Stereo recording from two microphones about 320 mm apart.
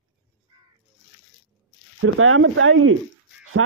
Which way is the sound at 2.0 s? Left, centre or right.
Right.